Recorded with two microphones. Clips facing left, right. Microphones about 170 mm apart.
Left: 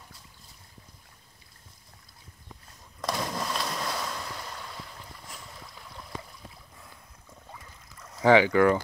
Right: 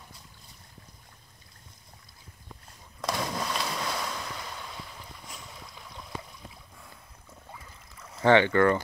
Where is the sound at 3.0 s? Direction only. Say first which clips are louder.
Even; centre (ahead or behind).